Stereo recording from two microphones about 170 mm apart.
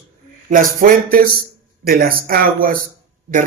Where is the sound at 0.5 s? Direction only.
55° right (ahead or behind).